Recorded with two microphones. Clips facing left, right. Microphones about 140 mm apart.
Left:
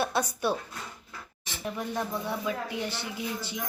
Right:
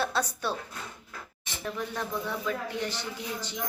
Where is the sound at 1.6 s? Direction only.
15° left (ahead or behind).